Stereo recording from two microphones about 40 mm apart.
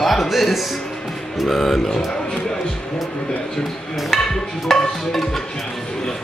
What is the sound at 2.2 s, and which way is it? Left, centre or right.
Music, centre.